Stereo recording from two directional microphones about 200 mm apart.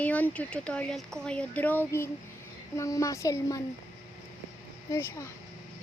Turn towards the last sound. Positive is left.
turn(degrees=15)  # may be behind; listen again after turning